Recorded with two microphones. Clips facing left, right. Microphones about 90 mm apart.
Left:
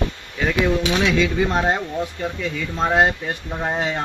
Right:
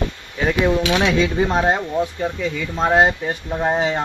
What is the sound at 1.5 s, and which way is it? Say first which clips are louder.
Speech: right 2 dB; 10° right (ahead or behind).